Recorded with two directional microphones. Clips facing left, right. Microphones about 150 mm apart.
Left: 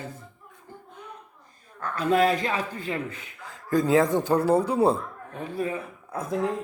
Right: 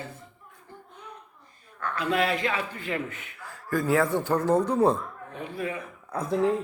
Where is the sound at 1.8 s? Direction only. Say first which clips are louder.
Left 4 dB; 40° left (ahead or behind).